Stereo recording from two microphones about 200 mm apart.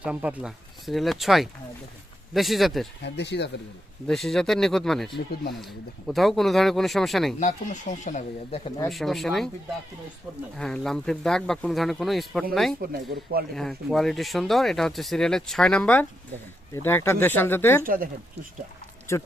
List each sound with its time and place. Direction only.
0.0 s speech: 5° right (ahead or behind)
3.0 s speech: 55° left (ahead or behind)
4.0 s speech: centre (ahead or behind)
7.3 s speech: 40° left (ahead or behind)
8.9 s speech: centre (ahead or behind)
10.6 s speech: 5° left (ahead or behind)
12.8 s speech: 45° right (ahead or behind)
13.5 s speech: centre (ahead or behind)
17.8 s speech: 45° right (ahead or behind)